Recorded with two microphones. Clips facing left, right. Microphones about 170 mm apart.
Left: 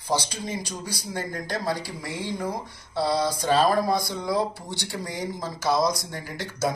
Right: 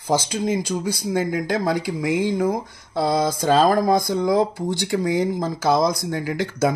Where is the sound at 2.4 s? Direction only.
50° right (ahead or behind).